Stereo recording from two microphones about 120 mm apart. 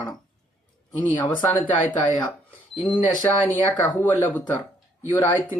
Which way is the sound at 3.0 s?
15° left (ahead or behind).